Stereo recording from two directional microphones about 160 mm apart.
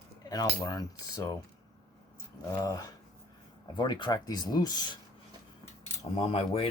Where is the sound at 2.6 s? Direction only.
20° left (ahead or behind).